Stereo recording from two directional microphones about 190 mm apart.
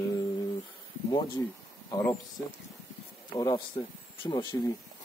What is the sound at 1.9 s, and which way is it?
Speech, 20° left (ahead or behind).